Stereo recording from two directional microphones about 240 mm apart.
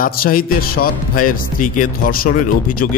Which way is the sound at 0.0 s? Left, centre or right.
Left.